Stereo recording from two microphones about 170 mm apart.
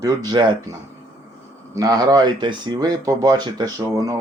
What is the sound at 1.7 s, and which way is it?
Speech, 20° right (ahead or behind).